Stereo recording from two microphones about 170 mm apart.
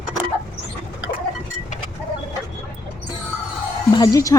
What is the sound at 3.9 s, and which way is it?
Speech, 20° left (ahead or behind).